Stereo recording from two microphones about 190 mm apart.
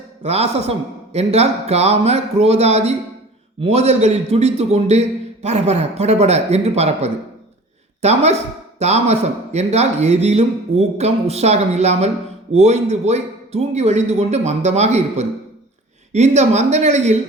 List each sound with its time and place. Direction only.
0.3 s a man's voice: 35° right (ahead or behind)